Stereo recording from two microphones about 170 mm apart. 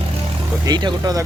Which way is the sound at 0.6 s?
25° right (ahead or behind).